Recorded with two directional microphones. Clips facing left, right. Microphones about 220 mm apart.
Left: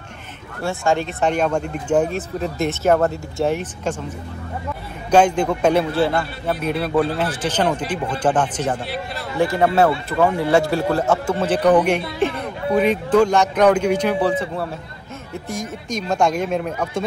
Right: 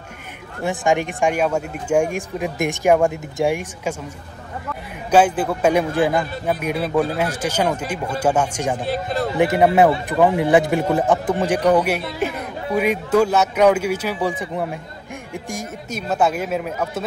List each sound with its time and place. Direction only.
0.6 s speech: 15° right (ahead or behind)
5.1 s speech: 5° right (ahead or behind)
8.8 s speech: 45° right (ahead or behind)
9.4 s speech: 20° right (ahead or behind)